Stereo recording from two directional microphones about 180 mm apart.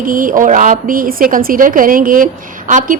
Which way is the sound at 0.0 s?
50° right (ahead or behind).